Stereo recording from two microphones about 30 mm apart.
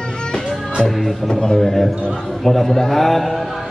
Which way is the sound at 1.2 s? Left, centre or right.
Left.